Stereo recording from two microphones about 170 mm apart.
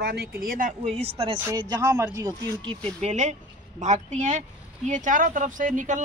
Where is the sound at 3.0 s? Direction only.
45° right (ahead or behind).